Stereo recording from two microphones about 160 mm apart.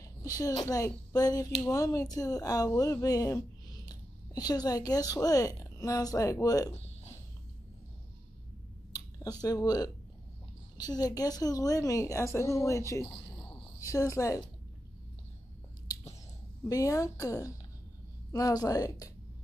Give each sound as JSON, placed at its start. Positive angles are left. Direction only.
{"t": 0.4, "sound": "a woman's voice", "side_deg": 20}
{"t": 6.7, "sound": "a sound", "side_deg": 45}
{"t": 9.4, "sound": "a woman's voice", "side_deg": 25}
{"t": 13.5, "sound": "a sound", "side_deg": 30}
{"t": 13.8, "sound": "a woman's voice", "side_deg": 20}
{"t": 16.6, "sound": "a woman's voice", "side_deg": 20}